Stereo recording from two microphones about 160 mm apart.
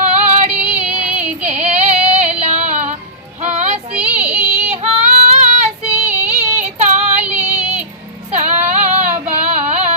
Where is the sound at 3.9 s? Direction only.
5° right (ahead or behind).